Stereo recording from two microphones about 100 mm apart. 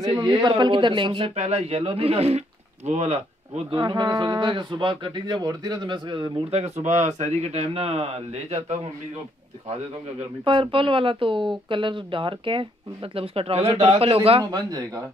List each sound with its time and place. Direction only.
0.0 s speech: 50° right (ahead or behind); by 3.8 s 90° right
3.8 s speech: 45° right (ahead or behind)
7.3 s speech: 90° right
10.4 s speech: 60° right (ahead or behind); by 14.4 s 75° right (ahead or behind)
14.4 s speech: 40° right (ahead or behind)